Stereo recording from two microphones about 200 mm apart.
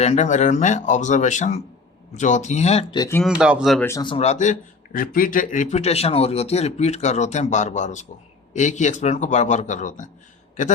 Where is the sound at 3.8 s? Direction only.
20° left (ahead or behind).